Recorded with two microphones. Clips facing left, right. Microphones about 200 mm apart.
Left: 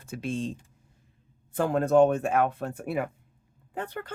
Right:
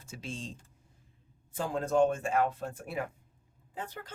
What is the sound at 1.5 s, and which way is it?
Speech, 60° left (ahead or behind).